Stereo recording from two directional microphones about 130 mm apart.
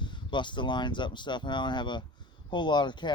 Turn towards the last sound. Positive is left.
turn(degrees=35)  # may be behind; listen again after turning